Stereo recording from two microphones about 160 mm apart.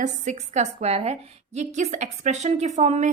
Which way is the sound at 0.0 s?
45° right (ahead or behind).